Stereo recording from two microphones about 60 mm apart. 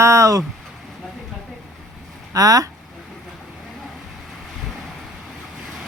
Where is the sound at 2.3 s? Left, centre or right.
Right.